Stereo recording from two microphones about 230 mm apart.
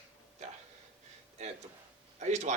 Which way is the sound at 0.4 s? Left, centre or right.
Right.